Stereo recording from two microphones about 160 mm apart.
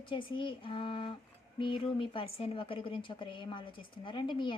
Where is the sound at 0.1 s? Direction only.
30° left (ahead or behind).